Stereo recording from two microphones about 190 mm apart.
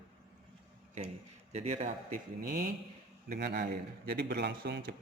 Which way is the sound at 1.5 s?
35° right (ahead or behind).